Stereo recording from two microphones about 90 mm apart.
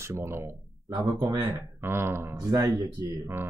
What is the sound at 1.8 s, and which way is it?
Speech, 25° right (ahead or behind).